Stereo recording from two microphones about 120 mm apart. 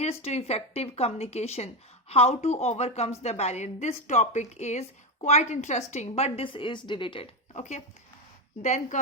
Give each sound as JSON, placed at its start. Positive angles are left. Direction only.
{"t": 0.0, "sound": "speech", "side_deg": 65}
{"t": 7.5, "sound": "speech", "side_deg": 80}